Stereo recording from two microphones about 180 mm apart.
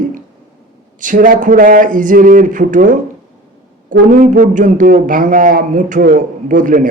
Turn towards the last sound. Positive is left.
turn(degrees=-50)  # may be behind; listen again after turning